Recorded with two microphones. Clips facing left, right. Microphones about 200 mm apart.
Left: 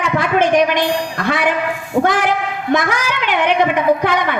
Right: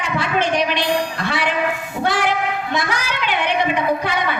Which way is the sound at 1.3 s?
50° left (ahead or behind).